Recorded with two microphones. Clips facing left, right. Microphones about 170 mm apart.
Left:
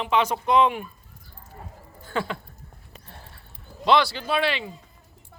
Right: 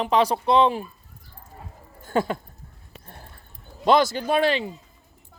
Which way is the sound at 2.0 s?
45° right (ahead or behind).